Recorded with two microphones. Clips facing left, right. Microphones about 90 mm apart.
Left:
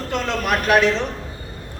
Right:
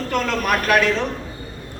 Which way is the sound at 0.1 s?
20° left (ahead or behind).